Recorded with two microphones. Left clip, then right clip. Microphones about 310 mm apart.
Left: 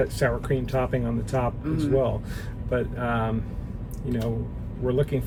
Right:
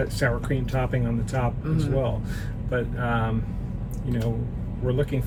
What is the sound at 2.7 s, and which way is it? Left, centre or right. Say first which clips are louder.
Speech: even; centre.